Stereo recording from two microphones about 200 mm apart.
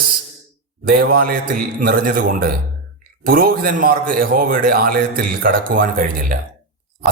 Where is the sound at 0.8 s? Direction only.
45° right (ahead or behind).